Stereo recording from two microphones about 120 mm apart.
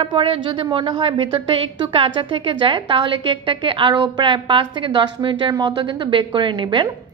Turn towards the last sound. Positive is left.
turn(degrees=-40)  # may be behind; listen again after turning